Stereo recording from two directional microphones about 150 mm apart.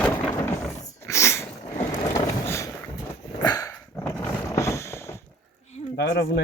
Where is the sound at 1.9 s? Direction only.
20° left (ahead or behind).